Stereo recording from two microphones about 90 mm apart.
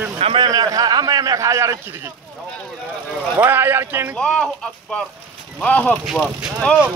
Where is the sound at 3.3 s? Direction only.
25° right (ahead or behind).